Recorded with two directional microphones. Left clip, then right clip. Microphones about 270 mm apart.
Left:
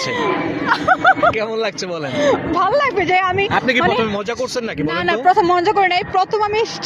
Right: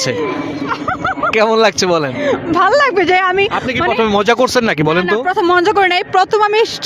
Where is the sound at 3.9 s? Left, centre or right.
Right.